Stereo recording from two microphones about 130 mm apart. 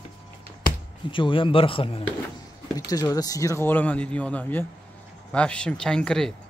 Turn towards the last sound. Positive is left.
turn(degrees=5)  # may be behind; listen again after turning